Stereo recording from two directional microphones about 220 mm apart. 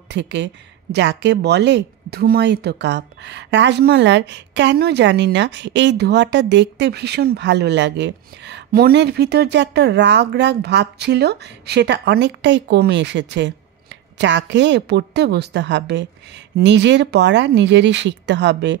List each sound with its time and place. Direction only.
0.1 s speech: 55° right (ahead or behind)